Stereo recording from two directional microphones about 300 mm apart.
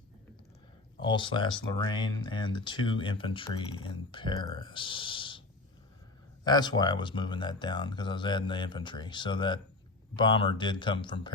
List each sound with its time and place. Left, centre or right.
1.0 s speech: centre
6.4 s speech: centre